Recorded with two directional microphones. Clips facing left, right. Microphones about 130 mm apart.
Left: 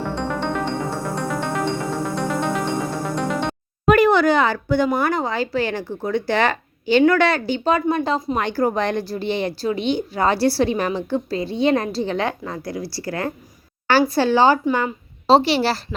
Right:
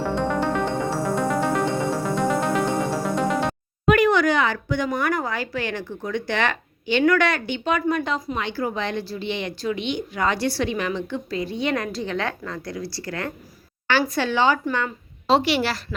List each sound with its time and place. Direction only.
0.2 s music: 5° right (ahead or behind)
3.8 s speech: 35° left (ahead or behind)
8.4 s speech: 45° left (ahead or behind); by 16.0 s 30° left (ahead or behind)